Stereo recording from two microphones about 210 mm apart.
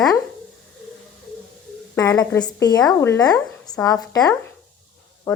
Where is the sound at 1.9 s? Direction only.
15° left (ahead or behind).